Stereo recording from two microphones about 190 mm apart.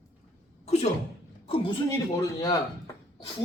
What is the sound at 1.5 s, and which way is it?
Speech, 30° left (ahead or behind).